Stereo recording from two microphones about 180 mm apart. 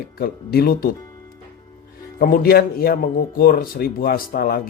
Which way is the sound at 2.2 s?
50° left (ahead or behind).